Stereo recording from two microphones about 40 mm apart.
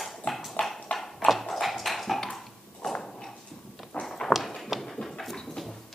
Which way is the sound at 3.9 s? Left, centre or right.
Left.